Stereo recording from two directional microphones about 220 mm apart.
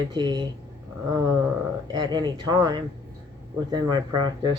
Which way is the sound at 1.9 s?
20° right (ahead or behind).